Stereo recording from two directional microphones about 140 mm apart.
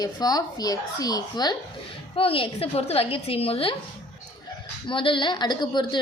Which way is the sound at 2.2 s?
40° left (ahead or behind).